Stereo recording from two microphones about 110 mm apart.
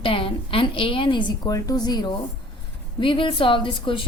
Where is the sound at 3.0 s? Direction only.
50° left (ahead or behind).